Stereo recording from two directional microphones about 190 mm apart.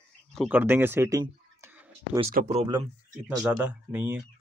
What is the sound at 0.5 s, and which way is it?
Speech, 10° right (ahead or behind).